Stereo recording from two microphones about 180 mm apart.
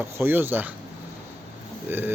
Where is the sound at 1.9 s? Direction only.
10° right (ahead or behind).